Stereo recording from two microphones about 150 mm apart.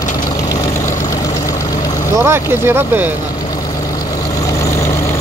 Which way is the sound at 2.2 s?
15° right (ahead or behind).